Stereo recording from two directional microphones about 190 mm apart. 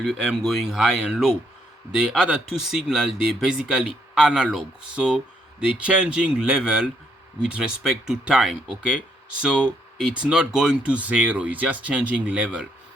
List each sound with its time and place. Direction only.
0.0 s speech: 5° right (ahead or behind)